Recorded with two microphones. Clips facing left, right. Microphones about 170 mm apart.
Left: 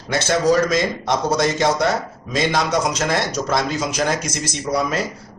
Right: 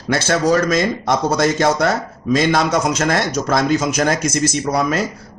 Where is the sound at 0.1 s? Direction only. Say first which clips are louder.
Right 1 dB; 55° right (ahead or behind).